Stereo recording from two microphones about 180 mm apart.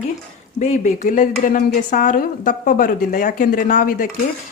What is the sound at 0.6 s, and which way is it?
A woman's voice, 45° left (ahead or behind).